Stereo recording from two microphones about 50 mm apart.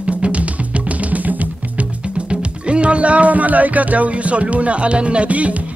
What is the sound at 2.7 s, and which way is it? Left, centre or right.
Speech, right.